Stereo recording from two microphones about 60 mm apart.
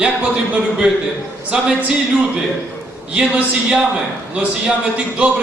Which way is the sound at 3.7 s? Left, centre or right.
Centre.